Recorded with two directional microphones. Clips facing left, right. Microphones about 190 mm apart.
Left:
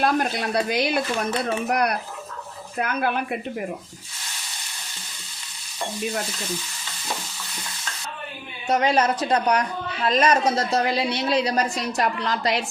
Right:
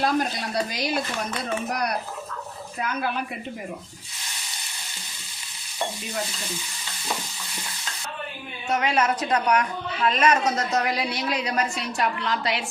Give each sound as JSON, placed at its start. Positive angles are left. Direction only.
{"t": 0.0, "sound": "speech", "side_deg": 60}
{"t": 2.7, "sound": "speech", "side_deg": 60}
{"t": 8.6, "sound": "a woman's voice", "side_deg": 35}